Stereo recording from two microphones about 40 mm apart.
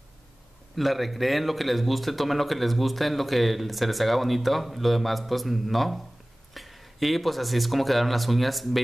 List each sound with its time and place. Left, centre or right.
0.7 s speech: centre